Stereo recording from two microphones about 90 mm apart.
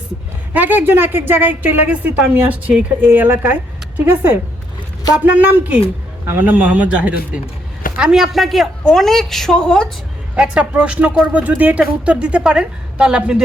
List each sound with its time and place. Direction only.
0.5 s a woman's voice: 20° right (ahead or behind); by 9.9 s 10° left (ahead or behind)
10.3 s a woman's voice: 15° right (ahead or behind)